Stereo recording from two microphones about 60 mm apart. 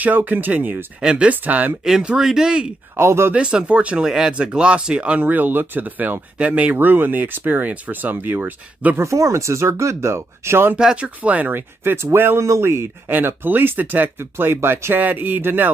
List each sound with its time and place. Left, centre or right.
0.0 s speech: right
1.9 s speech: centre
3.0 s speech: right
3.3 s speech: centre
8.9 s speech: right
10.8 s speech: centre
11.2 s speech: right
13.1 s speech: right